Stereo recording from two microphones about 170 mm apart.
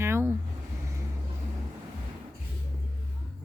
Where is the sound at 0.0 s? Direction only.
15° right (ahead or behind).